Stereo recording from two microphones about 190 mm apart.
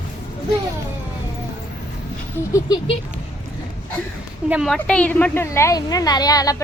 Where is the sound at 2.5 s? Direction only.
20° left (ahead or behind).